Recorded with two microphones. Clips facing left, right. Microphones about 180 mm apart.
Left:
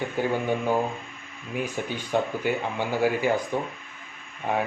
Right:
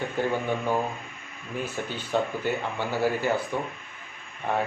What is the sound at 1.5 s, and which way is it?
Speech, 15° left (ahead or behind).